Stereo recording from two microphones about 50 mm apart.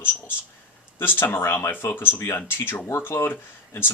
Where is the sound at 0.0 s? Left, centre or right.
Left.